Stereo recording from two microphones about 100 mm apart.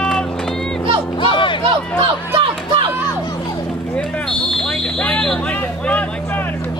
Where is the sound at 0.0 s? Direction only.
5° left (ahead or behind).